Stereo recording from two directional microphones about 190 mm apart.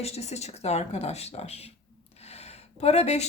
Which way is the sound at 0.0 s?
35° left (ahead or behind).